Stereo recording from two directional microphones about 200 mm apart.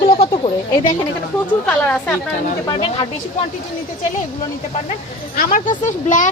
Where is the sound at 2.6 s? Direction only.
25° left (ahead or behind).